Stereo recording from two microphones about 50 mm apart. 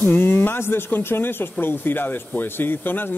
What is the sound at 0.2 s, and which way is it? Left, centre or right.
Speech, left.